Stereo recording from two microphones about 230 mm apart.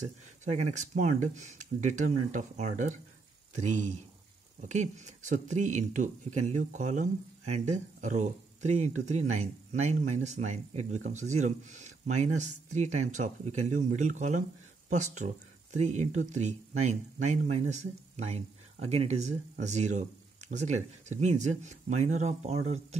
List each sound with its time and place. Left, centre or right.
0.5 s speech: right